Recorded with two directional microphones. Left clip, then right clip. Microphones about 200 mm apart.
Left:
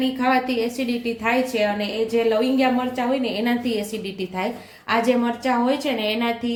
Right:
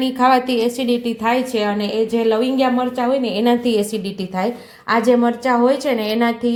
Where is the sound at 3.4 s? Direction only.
35° right (ahead or behind).